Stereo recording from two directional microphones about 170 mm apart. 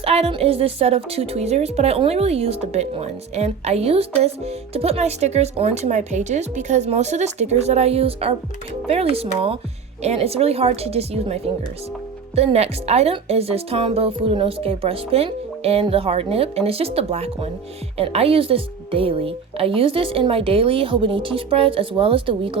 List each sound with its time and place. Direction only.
0.0 s a woman's voice: 35° right (ahead or behind)
12.4 s a woman's voice: 35° right (ahead or behind)